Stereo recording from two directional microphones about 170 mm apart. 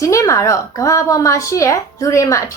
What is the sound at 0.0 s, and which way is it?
A woman's voice, 20° left (ahead or behind).